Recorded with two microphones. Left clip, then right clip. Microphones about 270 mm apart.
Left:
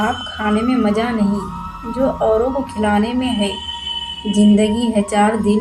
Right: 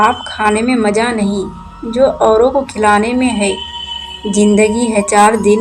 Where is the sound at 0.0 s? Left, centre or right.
Centre.